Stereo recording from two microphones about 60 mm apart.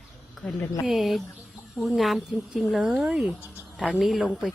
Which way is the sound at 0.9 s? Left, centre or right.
Centre.